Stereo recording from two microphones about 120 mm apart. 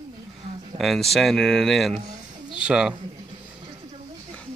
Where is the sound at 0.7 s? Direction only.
Centre (ahead or behind).